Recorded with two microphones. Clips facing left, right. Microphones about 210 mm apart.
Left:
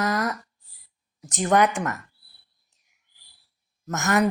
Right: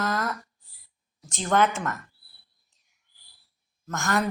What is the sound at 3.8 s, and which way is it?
Speech, 20° left (ahead or behind).